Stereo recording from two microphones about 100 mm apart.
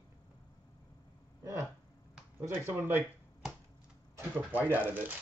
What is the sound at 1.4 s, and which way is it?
Speech, 30° right (ahead or behind).